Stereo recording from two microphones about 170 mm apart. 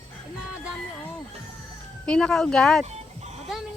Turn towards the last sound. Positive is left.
turn(degrees=-40)  # may be behind; listen again after turning